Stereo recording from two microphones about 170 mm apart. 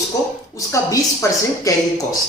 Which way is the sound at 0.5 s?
20° left (ahead or behind).